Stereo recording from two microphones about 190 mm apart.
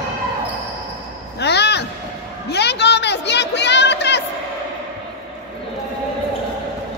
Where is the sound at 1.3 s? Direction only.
60° left (ahead or behind).